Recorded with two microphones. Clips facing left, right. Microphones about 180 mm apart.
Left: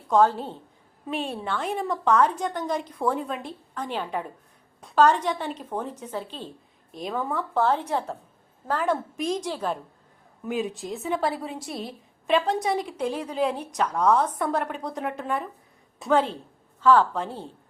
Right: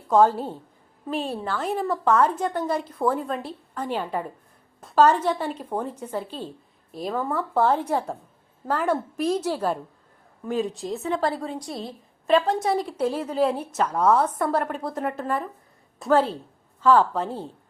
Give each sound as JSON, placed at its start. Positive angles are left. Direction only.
{"t": 0.1, "sound": "a woman's voice", "side_deg": -10}
{"t": 11.7, "sound": "a woman's voice", "side_deg": -25}
{"t": 12.3, "sound": "a woman's voice", "side_deg": 0}